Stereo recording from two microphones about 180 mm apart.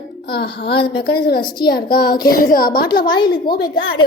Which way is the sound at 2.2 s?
50° left (ahead or behind).